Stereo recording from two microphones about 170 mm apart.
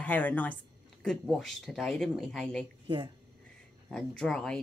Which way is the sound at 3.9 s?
5° left (ahead or behind).